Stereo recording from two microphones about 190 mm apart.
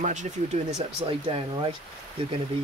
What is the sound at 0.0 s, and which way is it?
Speech, 40° right (ahead or behind).